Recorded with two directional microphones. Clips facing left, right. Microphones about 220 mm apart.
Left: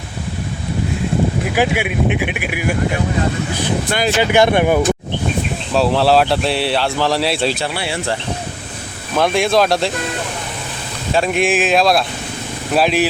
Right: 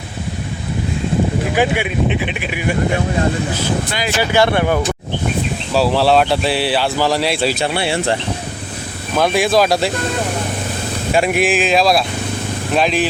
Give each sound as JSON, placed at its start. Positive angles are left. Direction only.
{"t": 1.5, "sound": "speech", "side_deg": 10}
{"t": 4.2, "sound": "speech", "side_deg": 20}
{"t": 5.7, "sound": "speech", "side_deg": 0}
{"t": 7.6, "sound": "speech", "side_deg": -25}
{"t": 9.1, "sound": "speech", "side_deg": 0}
{"t": 11.1, "sound": "speech", "side_deg": -10}